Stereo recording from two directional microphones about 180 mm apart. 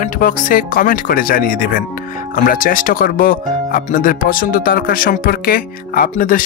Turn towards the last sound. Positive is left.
turn(degrees=50)  # may be behind; listen again after turning